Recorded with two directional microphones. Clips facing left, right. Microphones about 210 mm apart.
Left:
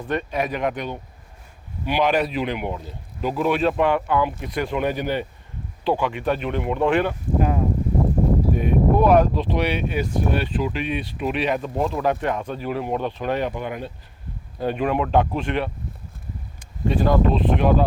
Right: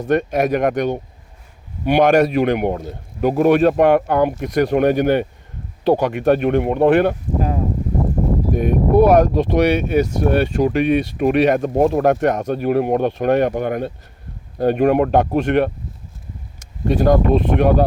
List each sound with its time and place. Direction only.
0.0 s speech: 45° right (ahead or behind)
5.8 s speech: 40° right (ahead or behind)
6.1 s speech: 55° right (ahead or behind)
8.5 s speech: 45° right (ahead or behind)
15.4 s speech: 60° right (ahead or behind)
16.6 s speech: 45° right (ahead or behind)